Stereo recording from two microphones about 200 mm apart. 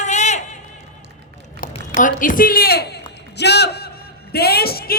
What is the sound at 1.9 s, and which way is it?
A woman's voice, 40° left (ahead or behind).